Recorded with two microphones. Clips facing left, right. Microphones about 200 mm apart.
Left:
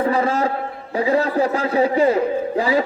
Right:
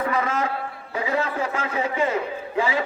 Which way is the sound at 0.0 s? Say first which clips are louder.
Left 6 dB; 30° left (ahead or behind).